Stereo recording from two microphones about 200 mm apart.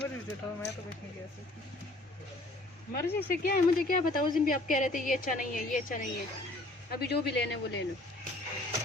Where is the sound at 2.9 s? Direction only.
50° left (ahead or behind).